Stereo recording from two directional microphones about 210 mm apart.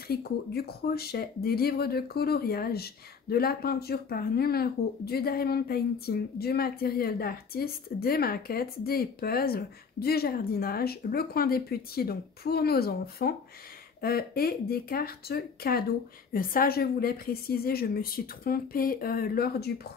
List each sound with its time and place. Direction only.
0.1 s speech: 50° left (ahead or behind)